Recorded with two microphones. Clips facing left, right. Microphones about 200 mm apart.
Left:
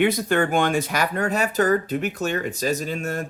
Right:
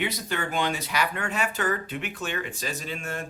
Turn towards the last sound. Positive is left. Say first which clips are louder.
# left 7 dB
turn(degrees=40)  # may be behind; listen again after turning